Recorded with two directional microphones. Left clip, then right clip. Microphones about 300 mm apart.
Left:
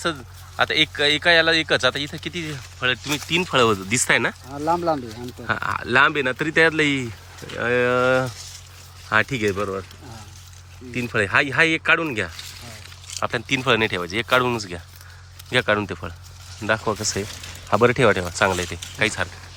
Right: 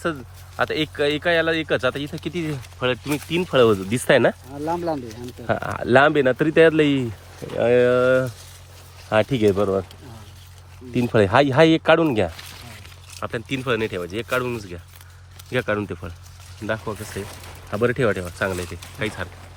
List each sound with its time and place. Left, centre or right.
0.0 s speech: centre
4.5 s speech: left
5.5 s speech: centre
10.9 s speech: centre
13.1 s speech: centre